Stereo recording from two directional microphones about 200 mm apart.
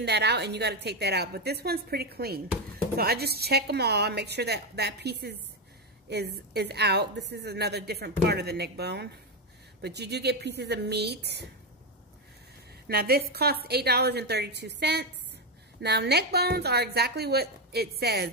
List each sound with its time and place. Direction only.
0.0 s a woman's voice: 55° right (ahead or behind)
12.8 s a woman's voice: 50° right (ahead or behind)